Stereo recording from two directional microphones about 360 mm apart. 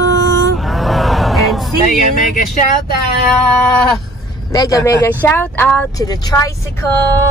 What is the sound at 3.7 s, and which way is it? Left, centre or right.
Speech, centre.